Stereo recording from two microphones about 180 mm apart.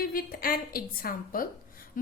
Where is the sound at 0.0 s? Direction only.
55° left (ahead or behind).